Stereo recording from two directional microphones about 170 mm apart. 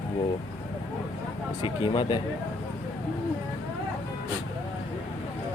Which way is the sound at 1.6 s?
30° left (ahead or behind).